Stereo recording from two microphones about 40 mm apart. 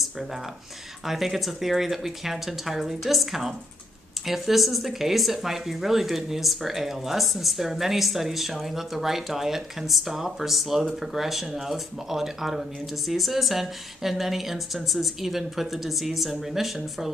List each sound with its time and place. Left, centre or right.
1.0 s speech: centre